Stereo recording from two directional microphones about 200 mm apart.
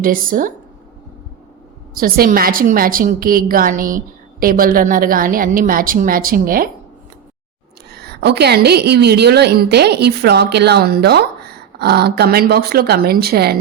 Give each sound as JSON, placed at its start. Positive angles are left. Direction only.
{"t": 0.0, "sound": "a woman's voice", "side_deg": -45}
{"t": 2.0, "sound": "a woman's voice", "side_deg": -45}
{"t": 7.9, "sound": "a woman's voice", "side_deg": -55}